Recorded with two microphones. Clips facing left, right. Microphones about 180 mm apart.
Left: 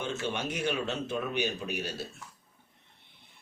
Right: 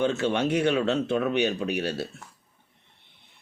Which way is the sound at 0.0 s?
65° right (ahead or behind).